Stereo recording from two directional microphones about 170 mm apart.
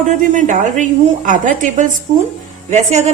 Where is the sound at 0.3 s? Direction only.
45° right (ahead or behind).